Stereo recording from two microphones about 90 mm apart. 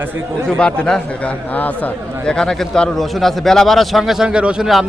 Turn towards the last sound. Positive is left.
turn(degrees=-10)  # may be behind; listen again after turning